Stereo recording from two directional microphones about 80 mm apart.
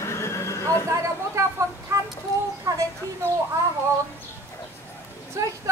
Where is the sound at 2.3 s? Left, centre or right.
Left.